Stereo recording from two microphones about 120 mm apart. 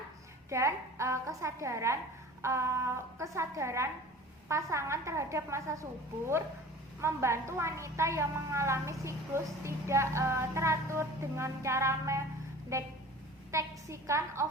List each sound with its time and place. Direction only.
0.5 s a woman's voice: 25° right (ahead or behind)